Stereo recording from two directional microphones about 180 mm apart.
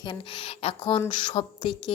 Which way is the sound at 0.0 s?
25° left (ahead or behind).